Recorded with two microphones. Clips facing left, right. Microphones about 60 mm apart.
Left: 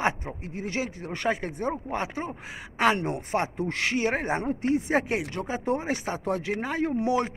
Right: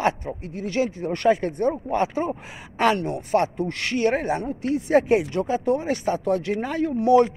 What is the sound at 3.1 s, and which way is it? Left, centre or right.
Speech, left.